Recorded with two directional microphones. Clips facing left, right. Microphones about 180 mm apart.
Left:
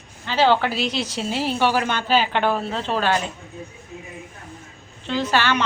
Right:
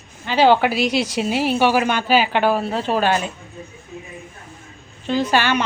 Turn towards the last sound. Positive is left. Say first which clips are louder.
# right 3 dB
turn(degrees=-10)  # may be behind; listen again after turning